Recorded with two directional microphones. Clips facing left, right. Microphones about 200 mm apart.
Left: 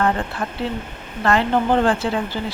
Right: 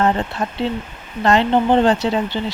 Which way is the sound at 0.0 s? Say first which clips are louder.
Right 3 dB; 20° right (ahead or behind).